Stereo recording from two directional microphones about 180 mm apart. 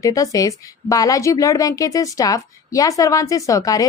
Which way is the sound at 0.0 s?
20° left (ahead or behind).